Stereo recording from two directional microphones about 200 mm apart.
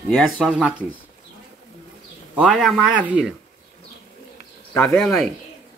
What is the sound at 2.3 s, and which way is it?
Speech, centre (ahead or behind).